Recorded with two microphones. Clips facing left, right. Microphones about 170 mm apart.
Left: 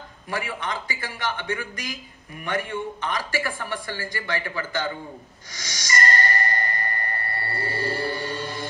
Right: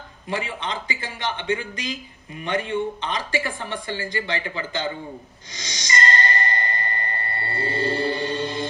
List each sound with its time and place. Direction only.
0.3 s speech: 20° right (ahead or behind)
5.5 s music: 20° right (ahead or behind)